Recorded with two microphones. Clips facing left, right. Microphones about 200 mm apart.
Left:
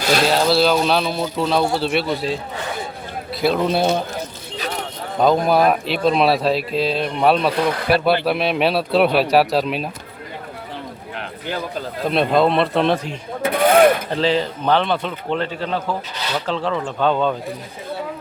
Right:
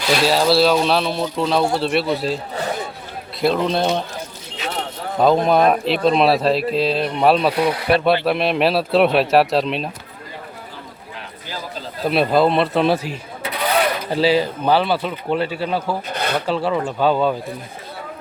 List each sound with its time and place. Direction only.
0.0 s speech: 45° left (ahead or behind)
0.3 s speech: centre (ahead or behind)
3.4 s speech: 5° left (ahead or behind)
5.1 s speech: centre (ahead or behind)
11.2 s a sound: 60° left (ahead or behind)
12.0 s speech: 5° right (ahead or behind)
13.4 s mechanisms: 50° left (ahead or behind)
14.1 s speech: 10° right (ahead or behind)
16.1 s speech: 55° right (ahead or behind)
16.5 s speech: 10° right (ahead or behind)